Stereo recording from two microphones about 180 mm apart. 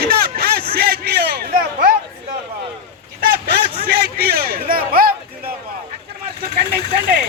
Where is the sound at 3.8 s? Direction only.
60° right (ahead or behind).